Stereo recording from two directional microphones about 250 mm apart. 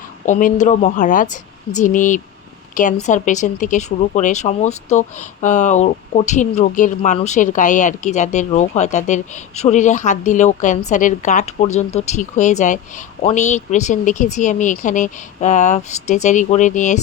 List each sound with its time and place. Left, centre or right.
0.3 s a woman's voice: left